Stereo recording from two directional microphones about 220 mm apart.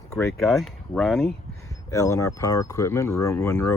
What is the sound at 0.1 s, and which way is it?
Speech, centre (ahead or behind).